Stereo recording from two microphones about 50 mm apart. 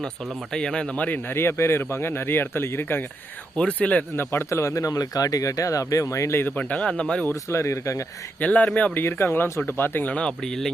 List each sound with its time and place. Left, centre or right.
0.5 s speech: centre
1.3 s speech: left
3.6 s speech: left
4.2 s speech: left
4.4 s speech: left
6.7 s speech: centre
7.5 s speech: left
8.4 s speech: left
9.0 s speech: left
10.1 s speech: centre